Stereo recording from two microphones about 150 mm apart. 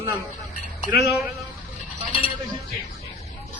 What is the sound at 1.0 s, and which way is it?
Speech, 5° right (ahead or behind).